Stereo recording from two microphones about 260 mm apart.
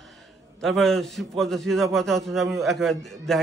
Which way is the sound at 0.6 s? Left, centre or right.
Centre.